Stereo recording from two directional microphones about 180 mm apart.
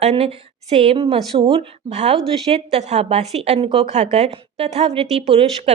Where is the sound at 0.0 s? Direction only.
35° right (ahead or behind).